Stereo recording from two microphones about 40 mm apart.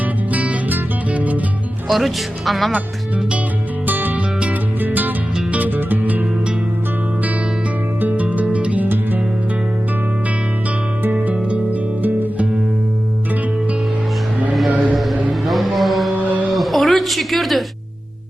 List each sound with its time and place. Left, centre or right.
0.0 s music: right
1.9 s speech: centre
3.8 s music: right
8.0 s music: right
11.0 s music: right
11.4 s music: right
12.0 s music: right
14.7 s a sound: right
14.9 s music: centre
16.1 s mantra: right
16.5 s a sound: centre